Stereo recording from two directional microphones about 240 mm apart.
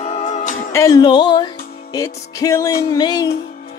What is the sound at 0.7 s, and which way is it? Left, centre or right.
Music, centre.